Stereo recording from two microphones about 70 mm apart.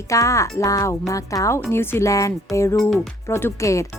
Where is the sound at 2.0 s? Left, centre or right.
Left.